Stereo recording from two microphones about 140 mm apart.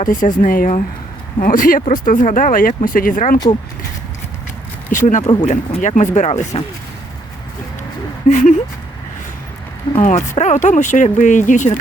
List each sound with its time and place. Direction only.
0.0 s speech: 70° left (ahead or behind)
4.9 s speech: 65° left (ahead or behind)
8.3 s speech: 65° left (ahead or behind)
10.0 s speech: 60° left (ahead or behind)